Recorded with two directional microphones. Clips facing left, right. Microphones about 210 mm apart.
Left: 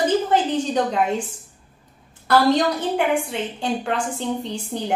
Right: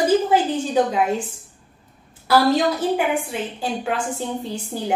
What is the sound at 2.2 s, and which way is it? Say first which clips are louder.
A woman's voice: even; 5° right (ahead or behind).